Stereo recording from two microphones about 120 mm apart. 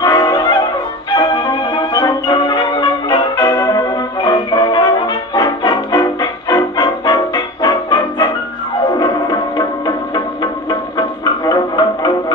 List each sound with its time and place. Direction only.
0.0 s music: 30° left (ahead or behind)